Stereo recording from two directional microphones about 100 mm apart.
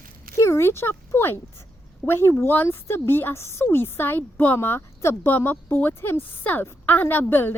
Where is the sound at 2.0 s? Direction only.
25° left (ahead or behind).